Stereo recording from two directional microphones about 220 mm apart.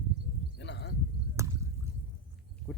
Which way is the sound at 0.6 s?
50° left (ahead or behind).